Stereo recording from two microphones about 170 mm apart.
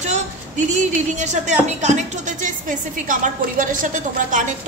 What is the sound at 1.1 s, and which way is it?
Speech, 45° right (ahead or behind).